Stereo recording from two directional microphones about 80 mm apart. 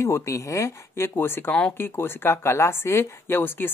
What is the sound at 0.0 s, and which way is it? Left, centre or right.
Speech, left.